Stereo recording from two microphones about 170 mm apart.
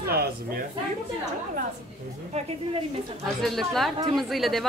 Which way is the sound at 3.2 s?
Centre (ahead or behind).